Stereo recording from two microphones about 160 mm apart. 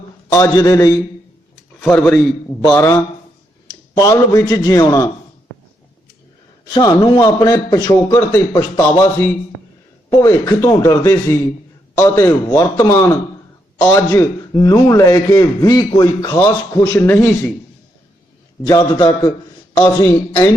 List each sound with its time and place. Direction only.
0.3 s a man's voice: 20° left (ahead or behind)
1.8 s speech: 10° left (ahead or behind)
2.7 s a man's voice: 15° left (ahead or behind)
6.7 s a man's voice: 25° left (ahead or behind)
18.6 s a man's voice: 25° left (ahead or behind)